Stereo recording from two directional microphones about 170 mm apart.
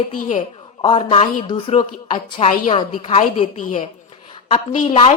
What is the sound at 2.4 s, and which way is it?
Speech, 50° left (ahead or behind).